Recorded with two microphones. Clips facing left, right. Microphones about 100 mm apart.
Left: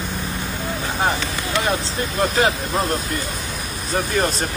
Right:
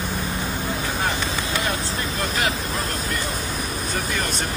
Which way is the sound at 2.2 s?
30° left (ahead or behind).